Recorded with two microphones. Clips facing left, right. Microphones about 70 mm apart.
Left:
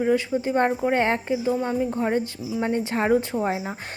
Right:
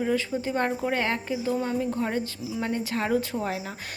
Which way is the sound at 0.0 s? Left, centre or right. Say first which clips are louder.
Left 4 dB; left.